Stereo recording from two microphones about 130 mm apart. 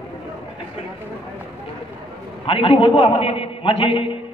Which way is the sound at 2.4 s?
40° left (ahead or behind).